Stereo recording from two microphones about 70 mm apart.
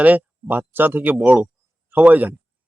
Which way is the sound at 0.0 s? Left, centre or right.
Right.